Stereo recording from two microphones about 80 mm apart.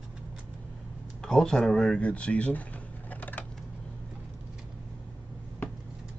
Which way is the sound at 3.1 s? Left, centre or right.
Left.